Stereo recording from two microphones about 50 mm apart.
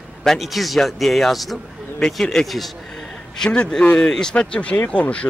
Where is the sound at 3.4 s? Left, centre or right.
Centre.